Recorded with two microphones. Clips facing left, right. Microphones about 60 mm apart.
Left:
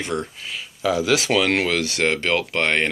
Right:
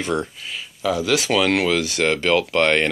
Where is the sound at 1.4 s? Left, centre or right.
Left.